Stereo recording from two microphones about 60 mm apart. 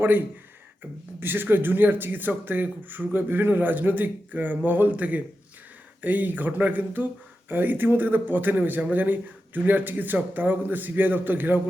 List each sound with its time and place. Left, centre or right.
0.0 s speech: right